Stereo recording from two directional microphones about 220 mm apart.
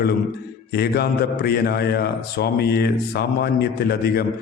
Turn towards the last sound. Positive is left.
turn(degrees=45)  # may be behind; listen again after turning